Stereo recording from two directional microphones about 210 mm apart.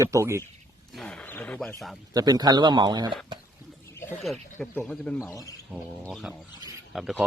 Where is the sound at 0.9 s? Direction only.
5° left (ahead or behind).